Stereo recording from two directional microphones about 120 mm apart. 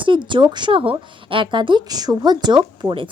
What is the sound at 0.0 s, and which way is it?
A woman's voice, 40° right (ahead or behind).